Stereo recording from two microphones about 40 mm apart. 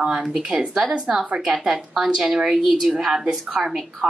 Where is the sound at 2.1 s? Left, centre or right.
Centre.